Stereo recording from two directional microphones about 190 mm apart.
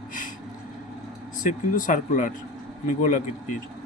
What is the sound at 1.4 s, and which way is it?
Speech, 45° left (ahead or behind).